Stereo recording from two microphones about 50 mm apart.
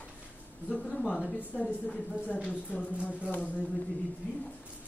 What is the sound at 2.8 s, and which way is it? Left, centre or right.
Speech, left.